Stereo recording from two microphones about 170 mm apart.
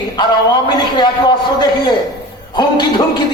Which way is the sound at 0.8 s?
25° left (ahead or behind).